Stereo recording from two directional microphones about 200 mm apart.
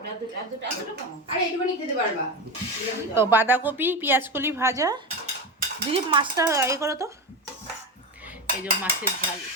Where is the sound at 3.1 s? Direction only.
10° right (ahead or behind).